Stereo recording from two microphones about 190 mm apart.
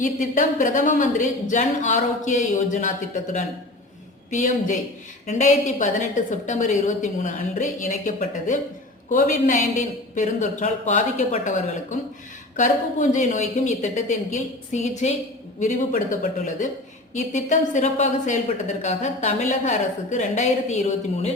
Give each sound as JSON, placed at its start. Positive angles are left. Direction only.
{"t": 0.0, "sound": "a man's voice", "side_deg": 40}